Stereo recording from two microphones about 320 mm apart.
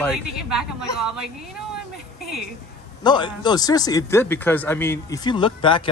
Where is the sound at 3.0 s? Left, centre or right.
Centre.